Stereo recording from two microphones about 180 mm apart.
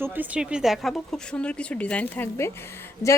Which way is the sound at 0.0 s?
10° right (ahead or behind).